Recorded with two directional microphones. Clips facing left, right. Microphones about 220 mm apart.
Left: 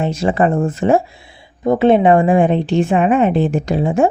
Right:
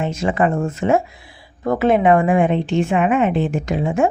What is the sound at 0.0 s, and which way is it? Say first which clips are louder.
A woman's voice: left 3 dB; 35° left (ahead or behind).